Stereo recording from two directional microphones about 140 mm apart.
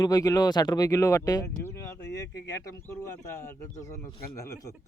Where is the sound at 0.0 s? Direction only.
25° left (ahead or behind).